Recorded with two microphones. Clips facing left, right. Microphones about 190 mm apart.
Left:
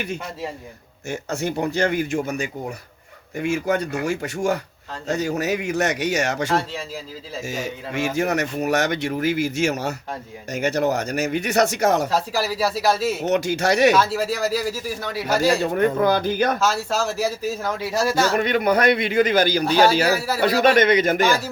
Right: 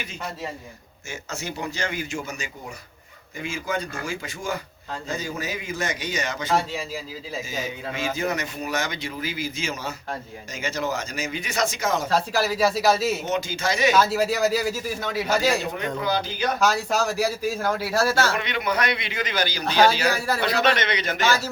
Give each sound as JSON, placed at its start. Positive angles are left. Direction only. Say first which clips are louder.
{"t": 1.0, "sound": "speech", "louder": "left 8 dB", "side_deg": 60}
{"t": 3.3, "sound": "speech", "louder": "left 7 dB", "side_deg": 70}
{"t": 6.5, "sound": "speech", "louder": "left 1 dB", "side_deg": -5}
{"t": 7.4, "sound": "speech", "louder": "left 6 dB", "side_deg": 75}
{"t": 12.0, "sound": "speech", "louder": "even", "side_deg": 10}
{"t": 13.2, "sound": "speech", "louder": "left 6 dB", "side_deg": 70}
{"t": 13.9, "sound": "speech", "louder": "even", "side_deg": 0}
{"t": 15.4, "sound": "a man's voice", "louder": "left 6 dB", "side_deg": 55}
{"t": 16.6, "sound": "a man's voice", "louder": "even", "side_deg": -15}
{"t": 17.9, "sound": "speech", "louder": "left 2 dB", "side_deg": 15}
{"t": 18.3, "sound": "a man's voice", "louder": "left 7 dB", "side_deg": 45}
{"t": 19.6, "sound": "speech", "louder": "right 2 dB", "side_deg": 10}
{"t": 20.7, "sound": "a man's voice", "louder": "left 10 dB", "side_deg": 50}